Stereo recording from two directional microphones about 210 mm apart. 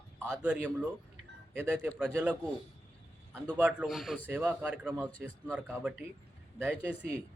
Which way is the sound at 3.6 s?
5° right (ahead or behind).